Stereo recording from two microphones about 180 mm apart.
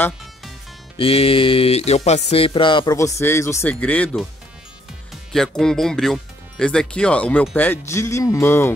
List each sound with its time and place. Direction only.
0.9 s music: 30° left (ahead or behind); by 4.3 s 5° left (ahead or behind)
5.3 s speech: 5° left (ahead or behind)